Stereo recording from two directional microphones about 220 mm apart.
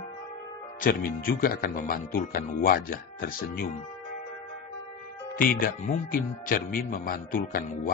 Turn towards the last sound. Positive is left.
turn(degrees=40)  # may be behind; listen again after turning